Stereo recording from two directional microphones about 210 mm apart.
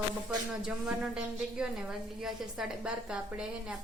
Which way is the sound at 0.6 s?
5° right (ahead or behind).